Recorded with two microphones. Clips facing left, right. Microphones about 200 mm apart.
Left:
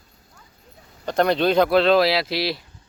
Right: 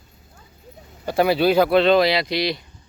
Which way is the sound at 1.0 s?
5° right (ahead or behind).